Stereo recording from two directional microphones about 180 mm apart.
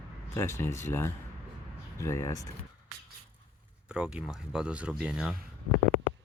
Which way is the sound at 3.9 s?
5° right (ahead or behind).